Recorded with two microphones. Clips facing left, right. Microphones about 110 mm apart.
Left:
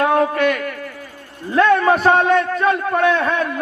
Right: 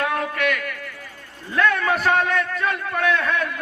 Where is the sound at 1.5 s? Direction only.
30° left (ahead or behind).